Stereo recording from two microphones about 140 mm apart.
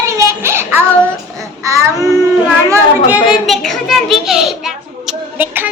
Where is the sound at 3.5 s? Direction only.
5° left (ahead or behind).